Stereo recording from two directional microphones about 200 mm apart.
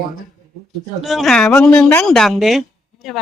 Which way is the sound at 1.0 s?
Centre (ahead or behind).